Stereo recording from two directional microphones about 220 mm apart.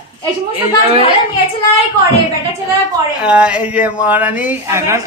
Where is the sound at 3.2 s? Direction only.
5° right (ahead or behind).